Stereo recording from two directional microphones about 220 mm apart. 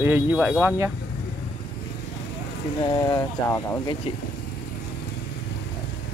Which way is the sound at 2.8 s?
20° left (ahead or behind).